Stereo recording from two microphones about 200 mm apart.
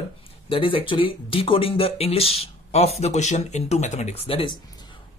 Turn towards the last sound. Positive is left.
turn(degrees=30)  # may be behind; listen again after turning